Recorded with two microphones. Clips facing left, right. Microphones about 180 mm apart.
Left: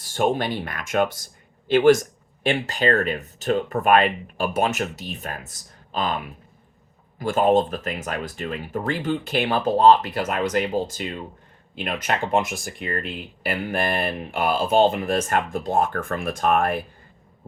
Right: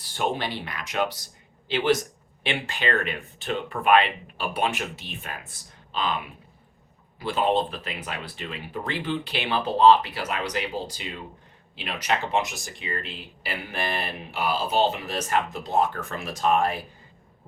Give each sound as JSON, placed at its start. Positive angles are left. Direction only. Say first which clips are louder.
{"t": 0.0, "sound": "a man's voice", "louder": "left 5 dB", "side_deg": 45}
{"t": 7.2, "sound": "speech", "louder": "left 5 dB", "side_deg": 45}